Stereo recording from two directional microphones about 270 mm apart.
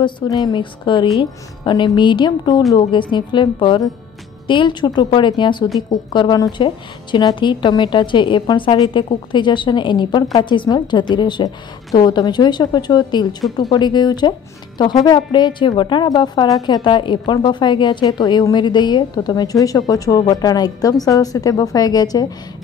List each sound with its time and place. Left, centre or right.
0.0 s a woman's voice: centre